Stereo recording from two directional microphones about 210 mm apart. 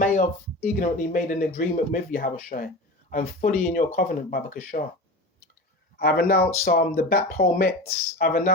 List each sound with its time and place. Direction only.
0.0 s speech: 40° left (ahead or behind)
6.0 s speech: 45° left (ahead or behind)